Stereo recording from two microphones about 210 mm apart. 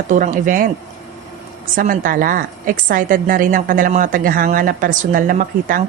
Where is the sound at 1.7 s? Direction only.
40° right (ahead or behind).